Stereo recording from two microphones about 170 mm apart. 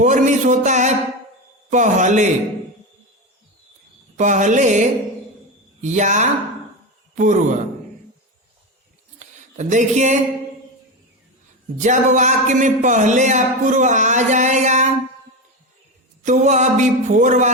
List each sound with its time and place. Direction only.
0.0 s speech: 45° right (ahead or behind)
4.2 s speech: 45° right (ahead or behind)
9.1 s a sound: 45° right (ahead or behind)
11.8 s speech: 45° right (ahead or behind)
16.2 s speech: 45° right (ahead or behind)